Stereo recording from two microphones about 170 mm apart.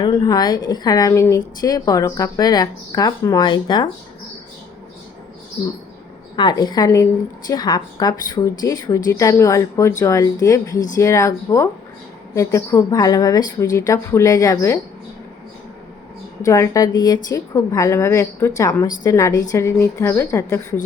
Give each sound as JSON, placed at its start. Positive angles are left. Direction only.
{"t": 0.0, "sound": "a woman's voice", "side_deg": 25}
{"t": 6.3, "sound": "a woman's voice", "side_deg": 25}
{"t": 16.4, "sound": "a woman's voice", "side_deg": 20}